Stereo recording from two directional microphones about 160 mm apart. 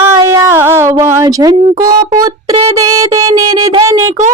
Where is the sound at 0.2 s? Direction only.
20° right (ahead or behind).